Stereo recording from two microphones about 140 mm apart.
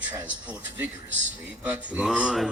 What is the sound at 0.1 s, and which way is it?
Speech, 10° right (ahead or behind).